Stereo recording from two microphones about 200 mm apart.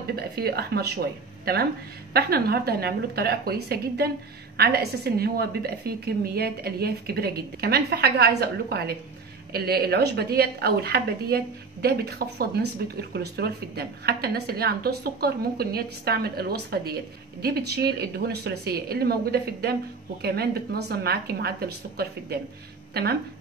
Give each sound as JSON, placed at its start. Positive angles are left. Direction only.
{"t": 0.1, "sound": "speech", "side_deg": -50}